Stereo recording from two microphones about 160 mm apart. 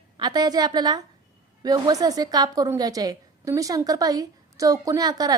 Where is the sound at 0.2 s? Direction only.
25° right (ahead or behind).